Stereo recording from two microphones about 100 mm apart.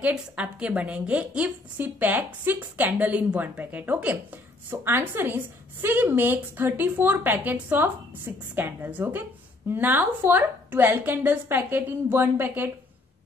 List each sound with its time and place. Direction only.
0.0 s a woman's voice: 10° right (ahead or behind)